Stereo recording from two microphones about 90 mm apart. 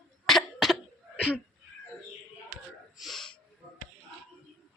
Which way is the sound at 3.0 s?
Centre (ahead or behind).